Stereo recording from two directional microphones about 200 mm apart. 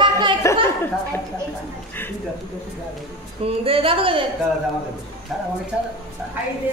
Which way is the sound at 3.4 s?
25° right (ahead or behind).